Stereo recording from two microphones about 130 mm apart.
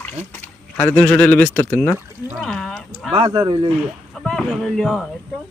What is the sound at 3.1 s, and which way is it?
Speech, 45° right (ahead or behind).